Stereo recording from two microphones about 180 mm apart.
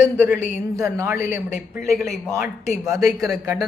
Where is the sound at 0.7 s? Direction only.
15° right (ahead or behind).